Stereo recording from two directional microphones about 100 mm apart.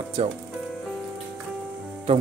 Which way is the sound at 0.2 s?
90° right.